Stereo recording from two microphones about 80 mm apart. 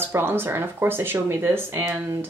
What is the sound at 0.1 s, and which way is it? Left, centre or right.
Speech, right.